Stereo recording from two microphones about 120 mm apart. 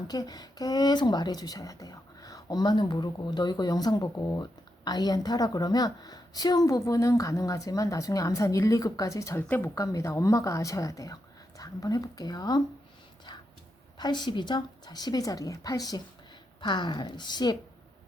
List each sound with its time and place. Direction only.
0.1 s a woman's voice: 35° left (ahead or behind)
14.0 s speech: 40° left (ahead or behind)